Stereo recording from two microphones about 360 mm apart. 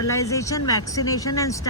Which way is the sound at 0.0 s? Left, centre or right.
Centre.